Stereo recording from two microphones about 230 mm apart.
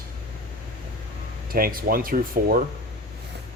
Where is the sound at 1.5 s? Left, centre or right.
Right.